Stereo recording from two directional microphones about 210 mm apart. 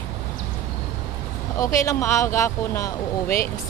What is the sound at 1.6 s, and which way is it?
Speech, 15° left (ahead or behind).